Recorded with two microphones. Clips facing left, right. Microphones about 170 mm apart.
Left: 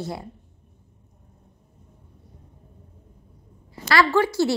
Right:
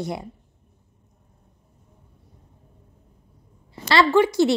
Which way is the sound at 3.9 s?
20° right (ahead or behind).